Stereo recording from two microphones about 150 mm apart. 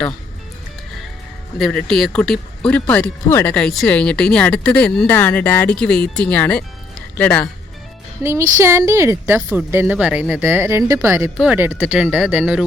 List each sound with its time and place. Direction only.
1.5 s speech: centre (ahead or behind)
3.5 s speech: 5° left (ahead or behind)
8.2 s a woman's voice: 20° right (ahead or behind)